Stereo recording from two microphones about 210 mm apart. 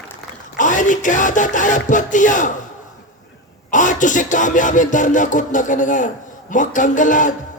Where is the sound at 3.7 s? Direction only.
35° left (ahead or behind).